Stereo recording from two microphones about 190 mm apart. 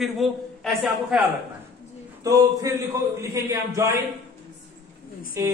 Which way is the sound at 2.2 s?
15° right (ahead or behind).